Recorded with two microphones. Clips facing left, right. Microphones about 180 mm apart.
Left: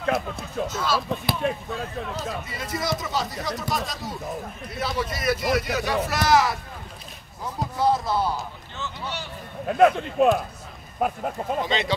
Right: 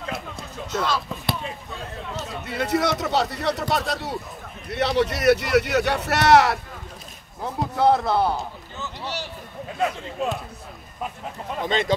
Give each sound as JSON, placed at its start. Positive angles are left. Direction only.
{"t": 0.4, "sound": "a sound", "side_deg": 5}
{"t": 1.7, "sound": "speech", "side_deg": 0}
{"t": 2.4, "sound": "speech", "side_deg": -65}
{"t": 7.7, "sound": "speech", "side_deg": -60}
{"t": 9.7, "sound": "speech", "side_deg": 60}
{"t": 11.6, "sound": "speech", "side_deg": -50}